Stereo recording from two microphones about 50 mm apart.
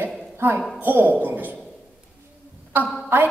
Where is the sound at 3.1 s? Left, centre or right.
Right.